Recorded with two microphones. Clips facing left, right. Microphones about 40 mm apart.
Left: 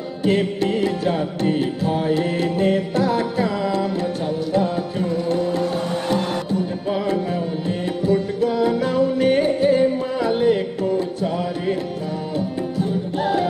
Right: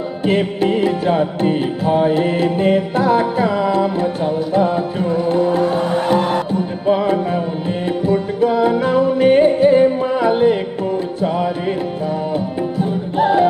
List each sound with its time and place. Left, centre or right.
0.3 s music: right
8.4 s music: right
13.2 s music: centre